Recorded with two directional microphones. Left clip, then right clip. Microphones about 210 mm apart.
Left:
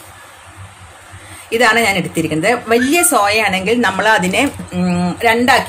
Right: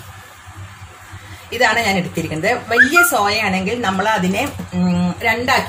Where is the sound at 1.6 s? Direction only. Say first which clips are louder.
Left 3 dB; 50° left (ahead or behind).